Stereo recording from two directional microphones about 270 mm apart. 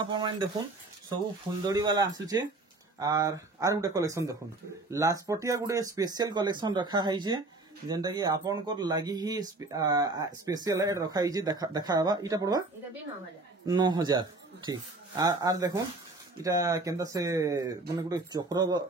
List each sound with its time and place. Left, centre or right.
0.0 s speech: centre
13.7 s speech: centre